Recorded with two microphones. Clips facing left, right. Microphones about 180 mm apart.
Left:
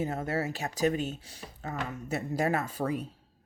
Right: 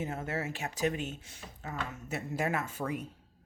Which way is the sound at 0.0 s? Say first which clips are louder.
Left 4 dB; 35° left (ahead or behind).